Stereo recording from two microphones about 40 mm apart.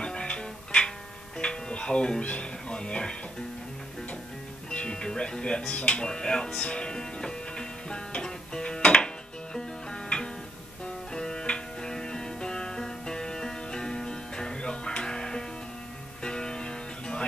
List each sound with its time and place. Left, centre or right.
0.0 s music: left
2.8 s speech: left
4.7 s speech: left
6.6 s music: left